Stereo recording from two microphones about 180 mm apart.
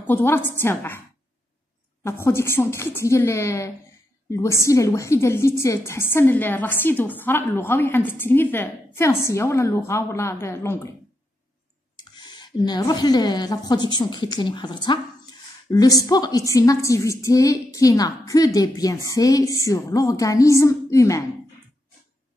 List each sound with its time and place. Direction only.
0.0 s a woman's voice: 10° left (ahead or behind)
2.0 s a woman's voice: 15° left (ahead or behind)
12.2 s a woman's voice: 25° left (ahead or behind)